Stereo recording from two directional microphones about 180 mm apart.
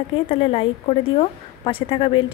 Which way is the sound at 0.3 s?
30° left (ahead or behind).